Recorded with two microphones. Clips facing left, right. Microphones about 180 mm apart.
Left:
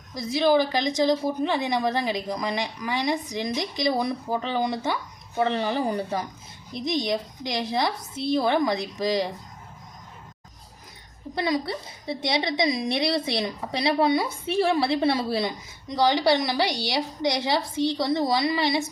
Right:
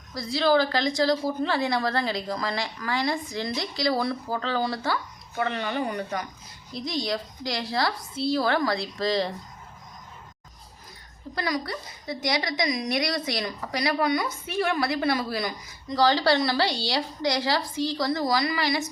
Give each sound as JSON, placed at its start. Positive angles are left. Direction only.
{"t": 0.1, "sound": "a woman's voice", "side_deg": 20}
{"t": 5.4, "sound": "speech", "side_deg": 30}
{"t": 6.7, "sound": "a woman's voice", "side_deg": 20}
{"t": 11.3, "sound": "a woman's voice", "side_deg": 25}